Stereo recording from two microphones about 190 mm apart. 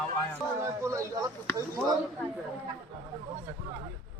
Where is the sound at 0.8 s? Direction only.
15° right (ahead or behind).